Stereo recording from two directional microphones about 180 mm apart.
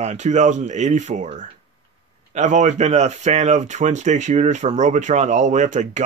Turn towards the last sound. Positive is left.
turn(degrees=-40)  # may be behind; listen again after turning